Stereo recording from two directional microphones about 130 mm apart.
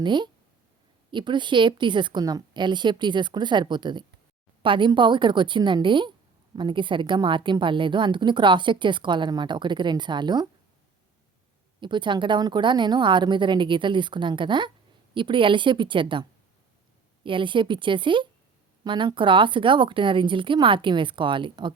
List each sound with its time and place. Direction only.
0.0 s a woman's voice: 35° right (ahead or behind)
11.8 s a woman's voice: 40° right (ahead or behind)
17.2 s a woman's voice: 40° right (ahead or behind)